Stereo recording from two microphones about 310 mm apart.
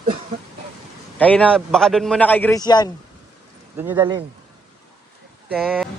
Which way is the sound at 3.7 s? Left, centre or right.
Centre.